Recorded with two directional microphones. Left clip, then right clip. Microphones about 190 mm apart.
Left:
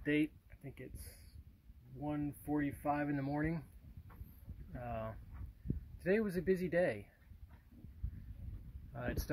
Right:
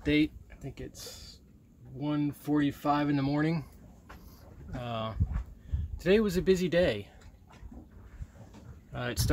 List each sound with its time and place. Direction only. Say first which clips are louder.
0.0 s speech: right 8 dB; centre (ahead or behind)
4.7 s speech: right 8 dB; 10° right (ahead or behind)
8.9 s speech: right 8 dB; 25° right (ahead or behind)